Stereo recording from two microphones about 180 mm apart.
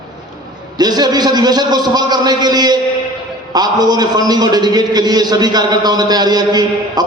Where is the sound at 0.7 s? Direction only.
20° right (ahead or behind).